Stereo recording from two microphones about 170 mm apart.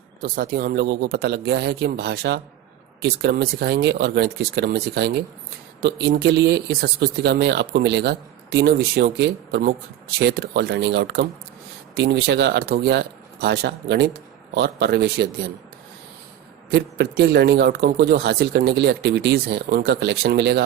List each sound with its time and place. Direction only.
0.2 s speech: 60° right (ahead or behind); by 11.3 s 80° right
11.9 s speech: 90° right; by 15.3 s 75° right (ahead or behind)
16.7 s speech: 80° right